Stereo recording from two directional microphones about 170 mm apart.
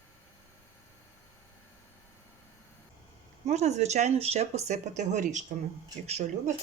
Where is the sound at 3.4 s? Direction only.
40° right (ahead or behind).